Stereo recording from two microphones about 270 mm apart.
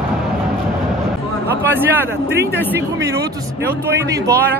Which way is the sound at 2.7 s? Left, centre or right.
Centre.